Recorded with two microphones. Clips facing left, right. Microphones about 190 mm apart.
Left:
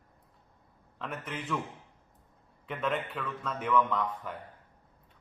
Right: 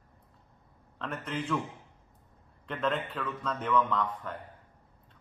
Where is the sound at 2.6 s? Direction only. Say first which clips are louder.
Right 1 dB; 5° left (ahead or behind).